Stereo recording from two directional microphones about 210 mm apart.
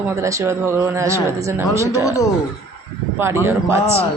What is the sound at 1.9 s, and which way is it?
Speech, 15° left (ahead or behind).